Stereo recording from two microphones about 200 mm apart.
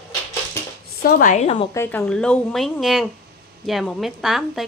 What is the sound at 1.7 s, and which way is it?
Speech, 10° left (ahead or behind).